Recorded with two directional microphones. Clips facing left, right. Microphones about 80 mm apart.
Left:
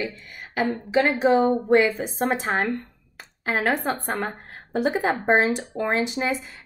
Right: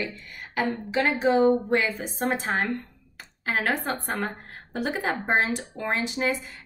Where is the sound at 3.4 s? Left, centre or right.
Left.